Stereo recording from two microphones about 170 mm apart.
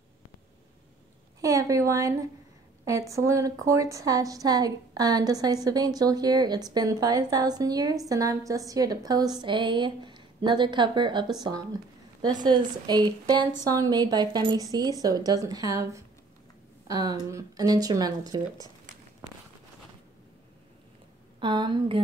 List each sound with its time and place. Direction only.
1.4 s a woman's voice: 20° right (ahead or behind)
21.4 s a woman's voice: 30° right (ahead or behind)